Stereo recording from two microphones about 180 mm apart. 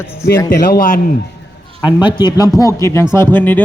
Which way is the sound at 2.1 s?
25° left (ahead or behind).